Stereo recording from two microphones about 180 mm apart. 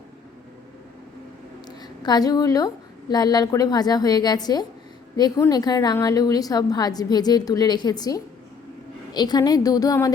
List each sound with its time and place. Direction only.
2.0 s a woman's voice: 20° left (ahead or behind)